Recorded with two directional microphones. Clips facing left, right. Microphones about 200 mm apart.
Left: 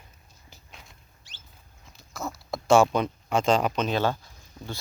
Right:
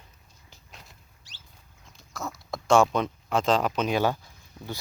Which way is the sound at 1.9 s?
Centre (ahead or behind).